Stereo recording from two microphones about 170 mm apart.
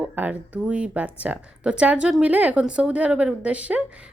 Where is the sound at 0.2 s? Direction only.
10° right (ahead or behind).